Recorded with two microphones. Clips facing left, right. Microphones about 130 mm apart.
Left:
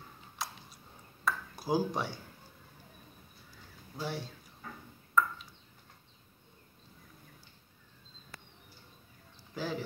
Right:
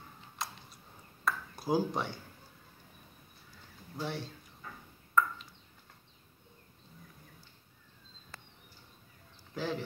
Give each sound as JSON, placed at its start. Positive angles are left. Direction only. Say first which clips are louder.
{"t": 0.4, "sound": "a sound", "louder": "even", "side_deg": 5}
{"t": 3.9, "sound": "speech", "louder": "even", "side_deg": 5}
{"t": 5.2, "sound": "ping", "louder": "even", "side_deg": 0}
{"t": 9.5, "sound": "speech", "louder": "right 1 dB", "side_deg": 5}